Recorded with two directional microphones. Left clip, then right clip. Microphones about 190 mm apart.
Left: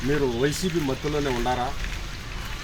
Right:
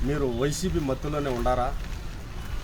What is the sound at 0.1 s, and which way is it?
Speech, 20° right (ahead or behind).